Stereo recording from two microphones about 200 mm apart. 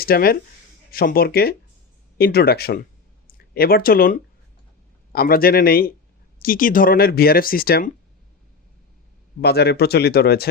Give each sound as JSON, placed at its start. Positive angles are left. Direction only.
{"t": 0.0, "sound": "speech", "side_deg": 50}
{"t": 9.4, "sound": "speech", "side_deg": 55}